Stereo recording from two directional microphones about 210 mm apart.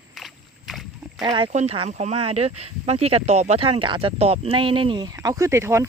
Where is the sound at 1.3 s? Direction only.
30° right (ahead or behind).